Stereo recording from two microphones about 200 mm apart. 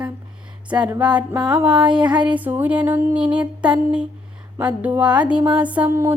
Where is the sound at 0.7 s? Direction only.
5° right (ahead or behind).